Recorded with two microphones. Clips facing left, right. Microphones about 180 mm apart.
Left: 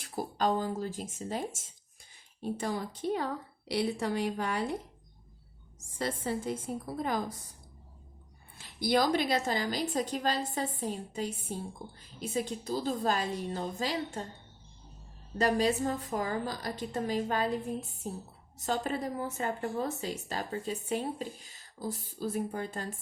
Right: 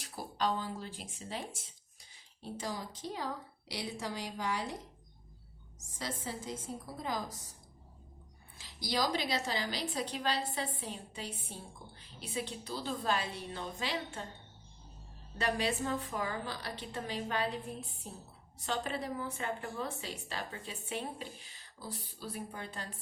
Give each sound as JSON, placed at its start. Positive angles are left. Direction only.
{"t": 0.0, "sound": "a woman's voice", "side_deg": 45}
{"t": 2.4, "sound": "a woman's voice", "side_deg": 55}
{"t": 6.0, "sound": "a woman's voice", "side_deg": 55}
{"t": 8.5, "sound": "a woman's voice", "side_deg": 55}
{"t": 15.4, "sound": "a woman's voice", "side_deg": 40}